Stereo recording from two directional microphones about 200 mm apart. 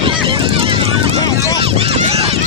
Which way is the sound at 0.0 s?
25° right (ahead or behind).